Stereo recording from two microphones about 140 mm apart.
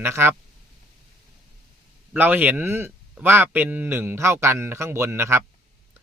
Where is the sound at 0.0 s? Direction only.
15° right (ahead or behind).